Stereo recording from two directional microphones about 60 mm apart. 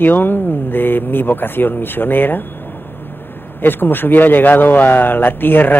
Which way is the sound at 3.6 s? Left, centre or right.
Left.